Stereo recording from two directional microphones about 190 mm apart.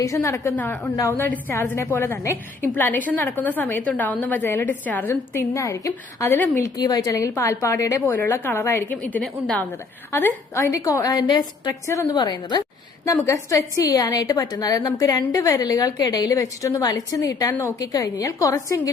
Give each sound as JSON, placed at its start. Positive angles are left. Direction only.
{"t": 0.0, "sound": "a woman's voice", "side_deg": 15}